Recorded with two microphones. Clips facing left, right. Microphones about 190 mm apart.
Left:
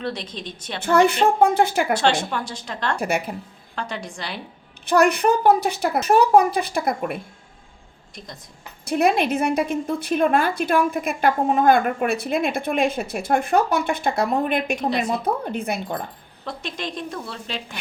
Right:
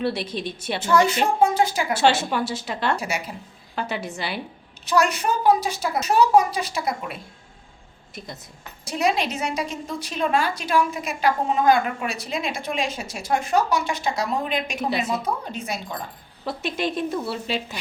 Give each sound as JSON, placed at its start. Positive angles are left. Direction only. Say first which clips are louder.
{"t": 0.0, "sound": "a woman's voice", "louder": "right 4 dB", "side_deg": -10}
{"t": 0.8, "sound": "a woman's voice", "louder": "left 3 dB", "side_deg": 60}
{"t": 1.9, "sound": "speech", "louder": "even", "side_deg": -5}
{"t": 3.0, "sound": "a woman's voice", "louder": "left 5 dB", "side_deg": 55}
{"t": 3.8, "sound": "speech", "louder": "right 2 dB", "side_deg": -5}
{"t": 4.9, "sound": "a woman's voice", "louder": "left 4 dB", "side_deg": 55}
{"t": 8.8, "sound": "a woman's voice", "louder": "left 4 dB", "side_deg": 55}
{"t": 14.8, "sound": "speech", "louder": "left 2 dB", "side_deg": -5}
{"t": 15.2, "sound": "a woman's voice", "louder": "left 4 dB", "side_deg": 55}
{"t": 16.5, "sound": "speech", "louder": "right 4 dB", "side_deg": -5}